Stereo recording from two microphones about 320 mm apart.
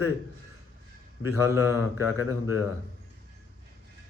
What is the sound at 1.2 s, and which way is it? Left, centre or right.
A man's voice, left.